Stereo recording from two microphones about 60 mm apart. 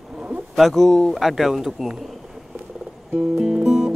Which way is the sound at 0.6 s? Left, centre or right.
Centre.